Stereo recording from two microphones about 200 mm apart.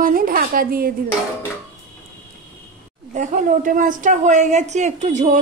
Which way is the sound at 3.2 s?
40° right (ahead or behind).